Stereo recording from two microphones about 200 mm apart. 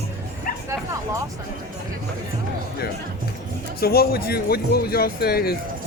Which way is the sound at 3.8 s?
50° left (ahead or behind).